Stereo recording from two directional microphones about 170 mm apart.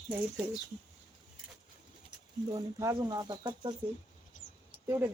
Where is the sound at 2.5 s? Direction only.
15° right (ahead or behind).